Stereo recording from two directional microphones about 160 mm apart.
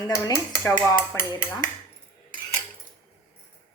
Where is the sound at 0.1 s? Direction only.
15° left (ahead or behind).